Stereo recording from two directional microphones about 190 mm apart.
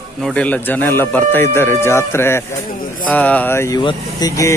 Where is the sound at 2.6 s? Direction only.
45° left (ahead or behind).